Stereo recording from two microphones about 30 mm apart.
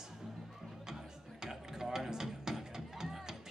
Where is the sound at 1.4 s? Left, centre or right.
Centre.